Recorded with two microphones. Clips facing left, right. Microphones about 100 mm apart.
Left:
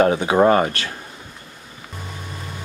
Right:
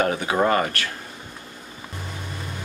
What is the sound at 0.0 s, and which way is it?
Speech, 25° left (ahead or behind).